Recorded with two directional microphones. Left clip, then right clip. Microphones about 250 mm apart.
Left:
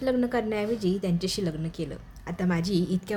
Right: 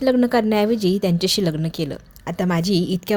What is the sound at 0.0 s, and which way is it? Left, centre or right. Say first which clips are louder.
A woman's voice: right 9 dB; right.